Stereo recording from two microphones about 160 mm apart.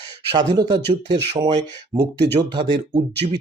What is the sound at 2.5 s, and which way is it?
Speech, 30° right (ahead or behind).